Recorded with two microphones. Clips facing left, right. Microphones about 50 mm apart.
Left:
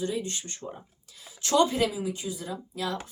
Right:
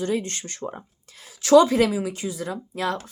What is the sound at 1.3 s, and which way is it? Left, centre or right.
Speech, right.